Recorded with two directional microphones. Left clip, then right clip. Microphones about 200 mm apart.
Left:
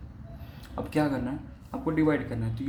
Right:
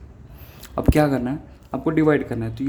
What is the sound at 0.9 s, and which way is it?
Speech, 55° right (ahead or behind).